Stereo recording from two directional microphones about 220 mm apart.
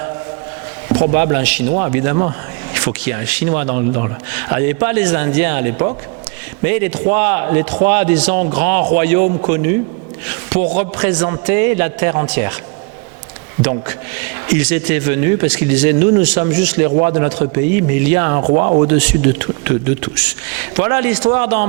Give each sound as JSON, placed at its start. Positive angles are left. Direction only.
{"t": 0.9, "sound": "a man's voice", "side_deg": -15}
{"t": 10.8, "sound": "a man's voice", "side_deg": -10}
{"t": 13.7, "sound": "a man's voice", "side_deg": -15}
{"t": 18.4, "sound": "speech", "side_deg": -30}
{"t": 18.9, "sound": "a man's voice", "side_deg": -15}